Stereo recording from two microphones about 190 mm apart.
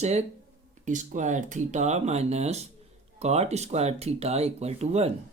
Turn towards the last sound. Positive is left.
turn(degrees=-35)  # may be behind; listen again after turning